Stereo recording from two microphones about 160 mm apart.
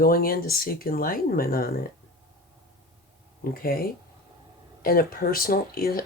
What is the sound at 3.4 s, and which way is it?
Speech, 65° left (ahead or behind).